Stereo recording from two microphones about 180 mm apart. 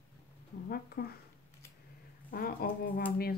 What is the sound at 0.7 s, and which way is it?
Speech, 60° left (ahead or behind).